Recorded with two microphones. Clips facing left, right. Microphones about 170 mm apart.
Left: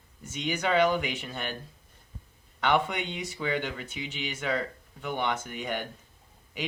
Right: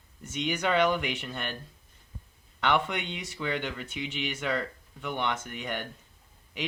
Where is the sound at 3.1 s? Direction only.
5° left (ahead or behind).